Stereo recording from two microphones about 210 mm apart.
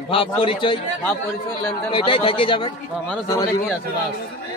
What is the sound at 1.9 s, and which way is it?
Speech, 25° left (ahead or behind).